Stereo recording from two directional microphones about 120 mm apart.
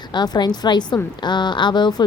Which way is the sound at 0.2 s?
35° left (ahead or behind).